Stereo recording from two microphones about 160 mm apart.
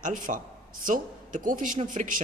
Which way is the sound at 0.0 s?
55° right (ahead or behind).